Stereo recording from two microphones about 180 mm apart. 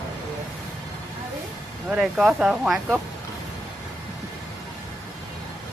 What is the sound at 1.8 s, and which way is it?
Speech, 5° right (ahead or behind).